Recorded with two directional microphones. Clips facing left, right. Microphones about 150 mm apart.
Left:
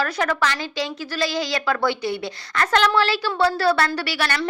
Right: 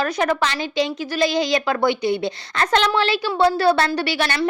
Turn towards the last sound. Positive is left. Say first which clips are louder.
# right 3 dB
turn(degrees=-20)  # may be behind; listen again after turning